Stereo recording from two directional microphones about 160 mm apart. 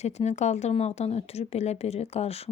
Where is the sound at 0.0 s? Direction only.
45° left (ahead or behind).